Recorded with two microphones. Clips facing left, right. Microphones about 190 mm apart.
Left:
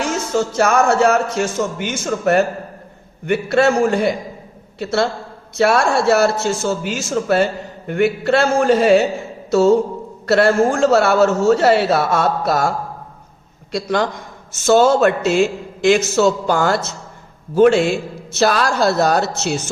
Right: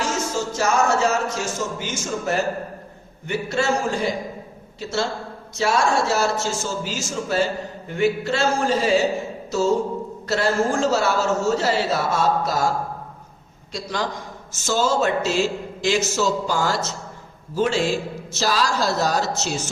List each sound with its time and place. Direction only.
0.0 s a man's voice: 60° left (ahead or behind)
13.7 s a man's voice: 60° left (ahead or behind)